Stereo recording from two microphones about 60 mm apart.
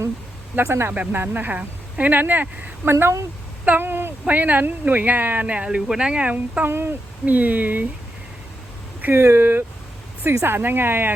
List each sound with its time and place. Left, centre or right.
0.6 s a woman's voice: right
2.9 s speech: right
3.7 s speech: right
6.7 s a woman's voice: right
7.3 s speech: right
9.1 s a woman's voice: right